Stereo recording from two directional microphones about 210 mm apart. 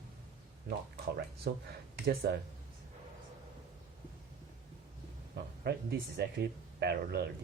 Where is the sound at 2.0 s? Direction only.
55° right (ahead or behind).